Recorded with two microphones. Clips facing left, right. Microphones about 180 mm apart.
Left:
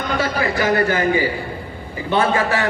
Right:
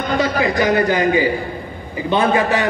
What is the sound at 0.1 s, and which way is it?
A man's voice, 20° right (ahead or behind).